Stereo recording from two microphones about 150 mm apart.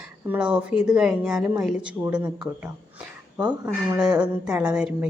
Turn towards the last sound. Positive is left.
turn(degrees=-5)  # may be behind; listen again after turning